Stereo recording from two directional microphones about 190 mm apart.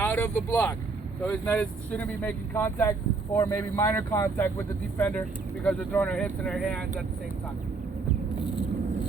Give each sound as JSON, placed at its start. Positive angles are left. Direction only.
{"t": 0.0, "sound": "speech", "side_deg": 15}